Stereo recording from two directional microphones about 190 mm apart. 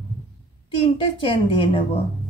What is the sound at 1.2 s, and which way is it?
Speech, 30° left (ahead or behind).